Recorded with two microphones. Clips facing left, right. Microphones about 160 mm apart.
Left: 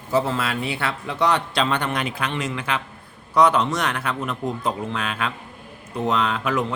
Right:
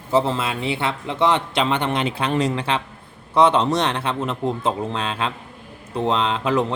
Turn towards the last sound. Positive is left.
turn(degrees=-30)  # may be behind; listen again after turning